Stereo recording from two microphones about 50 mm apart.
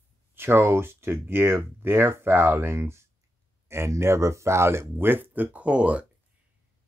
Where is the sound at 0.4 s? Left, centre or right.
Right.